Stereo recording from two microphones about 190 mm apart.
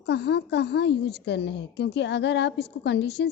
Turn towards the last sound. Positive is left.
turn(degrees=65)  # may be behind; listen again after turning